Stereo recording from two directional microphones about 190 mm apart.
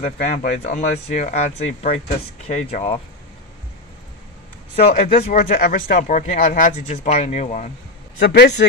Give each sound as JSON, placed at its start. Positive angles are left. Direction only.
{"t": 0.0, "sound": "speech", "side_deg": 40}
{"t": 4.7, "sound": "speech", "side_deg": 35}
{"t": 8.2, "sound": "a man's voice", "side_deg": 65}